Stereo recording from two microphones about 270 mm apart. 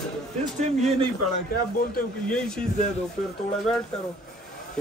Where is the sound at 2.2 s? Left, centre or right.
Centre.